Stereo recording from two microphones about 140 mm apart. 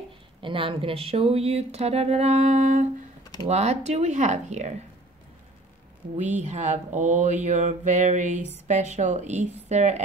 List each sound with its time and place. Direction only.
0.4 s speech: 40° right (ahead or behind); by 2.9 s 55° right (ahead or behind)
3.4 s mantra: 50° right (ahead or behind)
6.1 s mantra: 60° right (ahead or behind)